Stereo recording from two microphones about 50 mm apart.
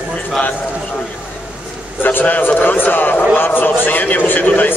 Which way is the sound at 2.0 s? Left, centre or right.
Left.